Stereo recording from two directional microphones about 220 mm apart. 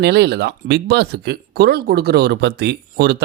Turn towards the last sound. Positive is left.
turn(degrees=-50)  # may be behind; listen again after turning